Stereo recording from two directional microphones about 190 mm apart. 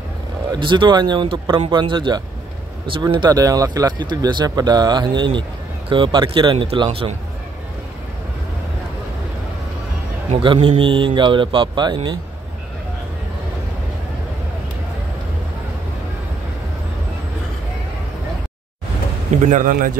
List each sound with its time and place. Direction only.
0.5 s speech: 25° right (ahead or behind)
10.3 s speech: 25° right (ahead or behind)
19.4 s a man's voice: 45° right (ahead or behind)